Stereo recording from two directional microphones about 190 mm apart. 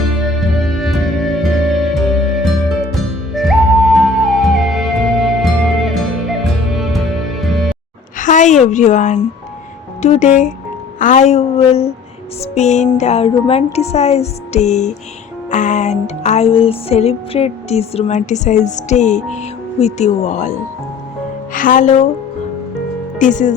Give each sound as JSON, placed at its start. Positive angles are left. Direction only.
{"t": 0.3, "sound": "music", "side_deg": 0}
{"t": 8.2, "sound": "a woman's voice", "side_deg": 40}
{"t": 10.0, "sound": "music", "side_deg": 40}
{"t": 21.5, "sound": "speech", "side_deg": 45}
{"t": 23.1, "sound": "speech", "side_deg": 40}